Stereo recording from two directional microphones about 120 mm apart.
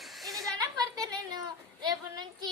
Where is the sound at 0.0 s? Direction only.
Centre (ahead or behind).